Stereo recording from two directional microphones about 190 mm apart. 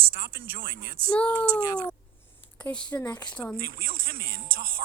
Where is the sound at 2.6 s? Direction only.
5° left (ahead or behind).